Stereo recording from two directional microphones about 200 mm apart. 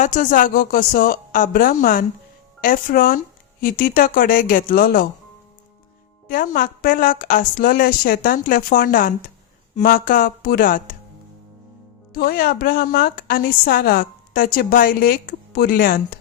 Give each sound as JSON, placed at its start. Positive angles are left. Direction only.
{"t": 0.0, "sound": "a woman's voice", "side_deg": 40}
{"t": 6.2, "sound": "a woman's voice", "side_deg": 45}
{"t": 12.1, "sound": "a woman's voice", "side_deg": 50}